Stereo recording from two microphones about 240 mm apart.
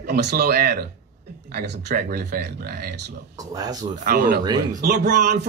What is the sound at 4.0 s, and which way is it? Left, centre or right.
A man's voice, right.